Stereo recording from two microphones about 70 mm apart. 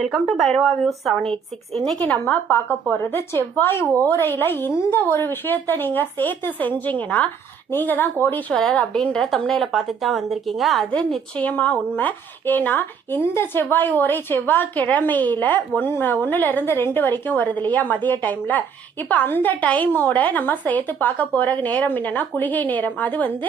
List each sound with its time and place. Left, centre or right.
0.0 s speech: centre
2.0 s speech: left
8.5 s a woman's voice: centre
11.3 s speech: left